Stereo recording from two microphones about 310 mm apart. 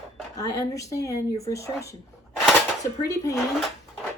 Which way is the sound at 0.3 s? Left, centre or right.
Centre.